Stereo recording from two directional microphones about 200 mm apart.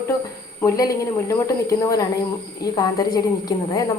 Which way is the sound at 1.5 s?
15° left (ahead or behind).